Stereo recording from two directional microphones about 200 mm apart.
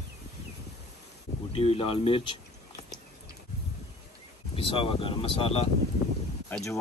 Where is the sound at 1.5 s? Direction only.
30° left (ahead or behind).